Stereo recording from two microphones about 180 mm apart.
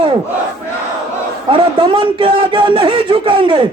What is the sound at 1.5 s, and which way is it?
Speech, 25° right (ahead or behind).